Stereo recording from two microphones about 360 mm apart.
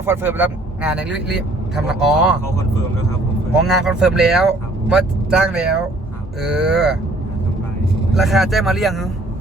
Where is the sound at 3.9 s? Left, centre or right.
Centre.